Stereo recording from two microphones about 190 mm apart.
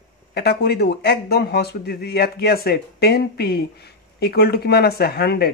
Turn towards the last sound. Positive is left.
turn(degrees=55)  # may be behind; listen again after turning